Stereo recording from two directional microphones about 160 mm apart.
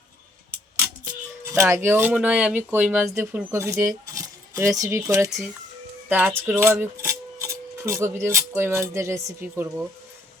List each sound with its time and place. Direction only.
1.5 s speech: 15° right (ahead or behind)